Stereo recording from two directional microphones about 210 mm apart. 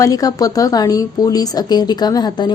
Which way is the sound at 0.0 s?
15° left (ahead or behind).